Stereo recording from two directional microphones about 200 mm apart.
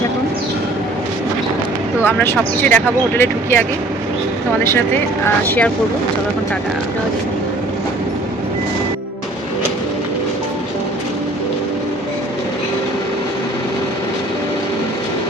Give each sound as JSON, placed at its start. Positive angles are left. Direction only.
{"t": 2.0, "sound": "speech", "side_deg": 10}
{"t": 5.2, "sound": "speech", "side_deg": 10}